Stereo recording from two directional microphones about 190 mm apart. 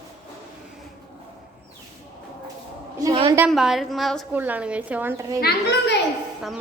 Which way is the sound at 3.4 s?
Centre (ahead or behind).